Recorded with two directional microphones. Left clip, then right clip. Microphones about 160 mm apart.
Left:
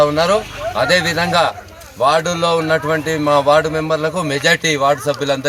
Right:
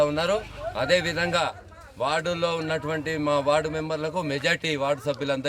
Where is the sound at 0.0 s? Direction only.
5° right (ahead or behind).